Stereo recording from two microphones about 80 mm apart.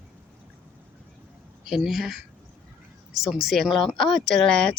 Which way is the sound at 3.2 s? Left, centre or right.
Centre.